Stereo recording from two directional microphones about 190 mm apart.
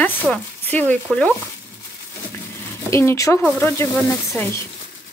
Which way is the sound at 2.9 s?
15° left (ahead or behind).